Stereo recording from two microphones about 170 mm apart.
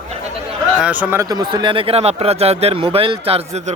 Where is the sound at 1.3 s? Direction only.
25° right (ahead or behind).